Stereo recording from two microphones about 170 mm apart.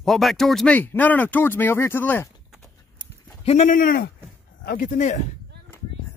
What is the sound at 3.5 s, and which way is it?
Speech, 45° left (ahead or behind).